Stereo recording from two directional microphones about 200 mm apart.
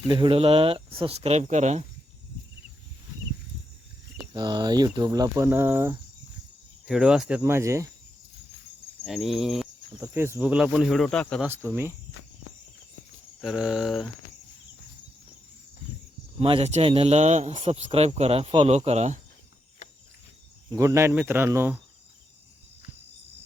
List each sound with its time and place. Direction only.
0.1 s speech: 25° right (ahead or behind)
4.4 s speech: 20° right (ahead or behind)
9.0 s speech: centre (ahead or behind)
10.0 s speech: 15° right (ahead or behind); by 11.4 s 5° left (ahead or behind)
11.4 s speech: 10° right (ahead or behind)
13.4 s speech: 5° right (ahead or behind)
16.4 s speech: 30° right (ahead or behind)
19.8 s cricket: 35° left (ahead or behind)
20.7 s speech: 15° right (ahead or behind)